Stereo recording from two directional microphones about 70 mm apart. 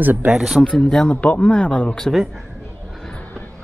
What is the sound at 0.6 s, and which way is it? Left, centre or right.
Speech, centre.